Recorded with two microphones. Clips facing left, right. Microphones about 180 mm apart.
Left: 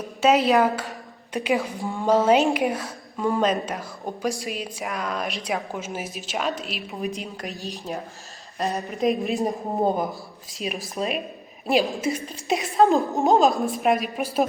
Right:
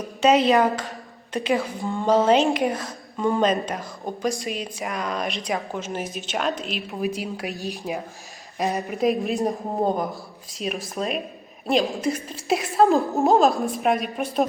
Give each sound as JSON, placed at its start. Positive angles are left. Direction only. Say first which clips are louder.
{"t": 0.2, "sound": "a woman's voice", "louder": "right 1 dB", "side_deg": 0}
{"t": 8.9, "sound": "a woman's voice", "louder": "even", "side_deg": 0}